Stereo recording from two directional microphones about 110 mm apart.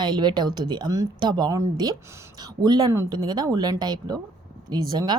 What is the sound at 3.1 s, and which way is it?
Speech, 40° right (ahead or behind).